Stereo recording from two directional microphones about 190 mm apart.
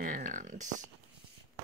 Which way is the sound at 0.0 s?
45° right (ahead or behind).